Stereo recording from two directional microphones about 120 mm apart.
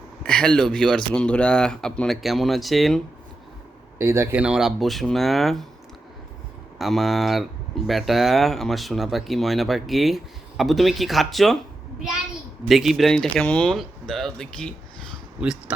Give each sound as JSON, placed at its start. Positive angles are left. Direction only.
{"t": 0.2, "sound": "speech", "side_deg": 10}
{"t": 3.9, "sound": "speech", "side_deg": -20}
{"t": 4.4, "sound": "speech", "side_deg": -5}
{"t": 6.7, "sound": "speech", "side_deg": 0}
{"t": 12.6, "sound": "speech", "side_deg": 0}